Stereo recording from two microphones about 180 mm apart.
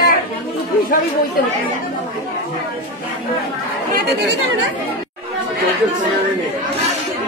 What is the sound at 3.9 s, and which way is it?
Speech, 65° right (ahead or behind).